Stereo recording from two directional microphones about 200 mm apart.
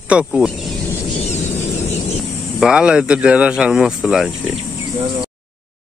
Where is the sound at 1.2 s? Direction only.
35° left (ahead or behind).